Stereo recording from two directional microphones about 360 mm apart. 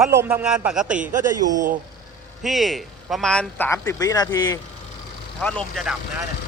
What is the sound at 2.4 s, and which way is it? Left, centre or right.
A man's voice, centre.